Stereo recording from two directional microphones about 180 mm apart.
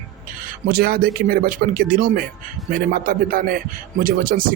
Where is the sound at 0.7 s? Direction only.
55° right (ahead or behind).